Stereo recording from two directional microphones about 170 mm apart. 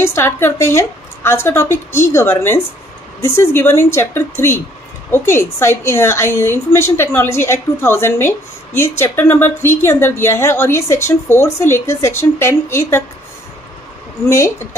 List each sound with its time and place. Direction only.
0.0 s a woman's voice: 15° left (ahead or behind)
14.3 s a woman's voice: 15° left (ahead or behind)